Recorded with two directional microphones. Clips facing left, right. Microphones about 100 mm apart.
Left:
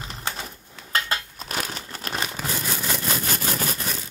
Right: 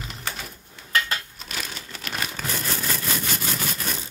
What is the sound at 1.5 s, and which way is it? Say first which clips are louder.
Crumpling: left 4 dB; 45° left (ahead or behind).